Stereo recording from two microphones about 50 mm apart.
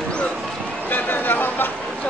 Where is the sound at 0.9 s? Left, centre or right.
Left.